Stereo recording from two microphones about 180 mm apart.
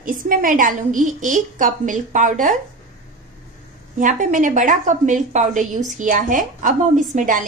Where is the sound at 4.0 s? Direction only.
45° right (ahead or behind).